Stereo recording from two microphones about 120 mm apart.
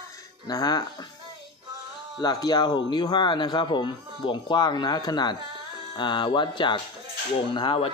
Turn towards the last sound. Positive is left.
turn(degrees=50)  # may be behind; listen again after turning